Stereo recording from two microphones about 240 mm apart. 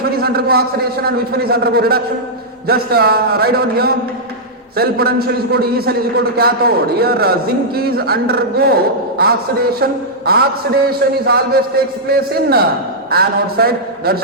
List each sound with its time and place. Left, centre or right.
0.2 s a man's voice: right